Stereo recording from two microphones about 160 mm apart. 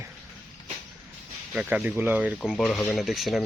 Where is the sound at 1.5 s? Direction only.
5° right (ahead or behind).